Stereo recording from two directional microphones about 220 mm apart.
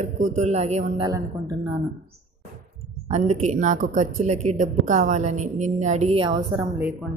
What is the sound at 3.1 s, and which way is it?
A woman's voice, 30° right (ahead or behind).